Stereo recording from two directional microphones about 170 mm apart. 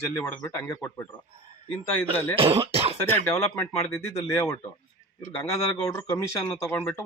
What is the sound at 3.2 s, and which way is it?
Speech, 15° left (ahead or behind).